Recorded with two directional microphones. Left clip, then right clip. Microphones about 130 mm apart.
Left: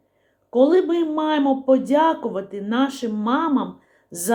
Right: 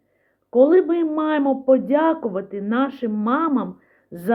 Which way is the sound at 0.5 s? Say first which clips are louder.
Right 2 dB; 25° right (ahead or behind).